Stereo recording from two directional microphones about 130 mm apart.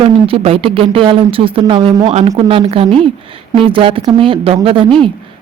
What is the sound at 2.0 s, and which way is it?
A woman's voice, 55° right (ahead or behind).